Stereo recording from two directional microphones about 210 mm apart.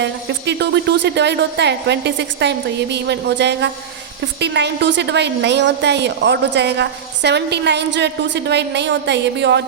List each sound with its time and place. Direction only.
0.0 s a woman's voice: 55° right (ahead or behind)